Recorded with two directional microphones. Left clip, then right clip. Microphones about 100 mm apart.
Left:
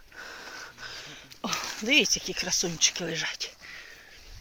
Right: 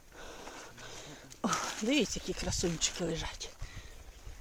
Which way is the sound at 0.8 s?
65° right (ahead or behind).